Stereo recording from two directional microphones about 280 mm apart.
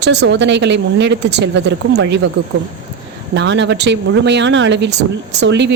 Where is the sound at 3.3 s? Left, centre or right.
Right.